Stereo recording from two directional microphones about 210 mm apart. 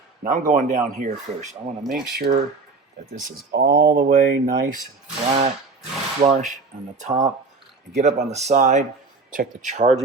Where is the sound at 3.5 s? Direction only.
50° right (ahead or behind).